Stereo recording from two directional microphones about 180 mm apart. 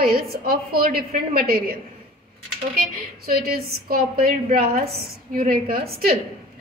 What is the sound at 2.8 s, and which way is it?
A woman's voice, 60° right (ahead or behind).